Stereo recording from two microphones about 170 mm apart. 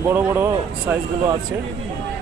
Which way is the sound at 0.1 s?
15° right (ahead or behind).